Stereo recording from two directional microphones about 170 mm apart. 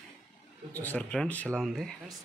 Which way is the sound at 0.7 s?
10° left (ahead or behind).